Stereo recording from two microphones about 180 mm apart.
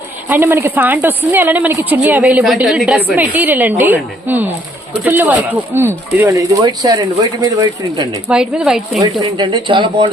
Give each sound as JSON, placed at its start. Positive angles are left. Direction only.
{"t": 0.3, "sound": "a woman's voice", "side_deg": -15}
{"t": 8.3, "sound": "speech", "side_deg": -5}
{"t": 9.2, "sound": "speech", "side_deg": -25}